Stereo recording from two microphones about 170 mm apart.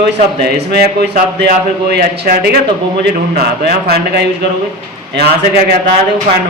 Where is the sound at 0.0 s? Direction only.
70° right (ahead or behind).